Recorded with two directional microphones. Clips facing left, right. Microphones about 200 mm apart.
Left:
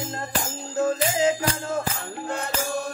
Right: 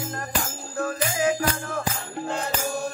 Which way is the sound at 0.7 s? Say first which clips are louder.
Left 4 dB; 20° left (ahead or behind).